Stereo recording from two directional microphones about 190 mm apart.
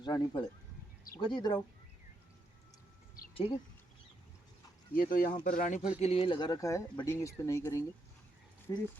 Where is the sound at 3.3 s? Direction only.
30° left (ahead or behind).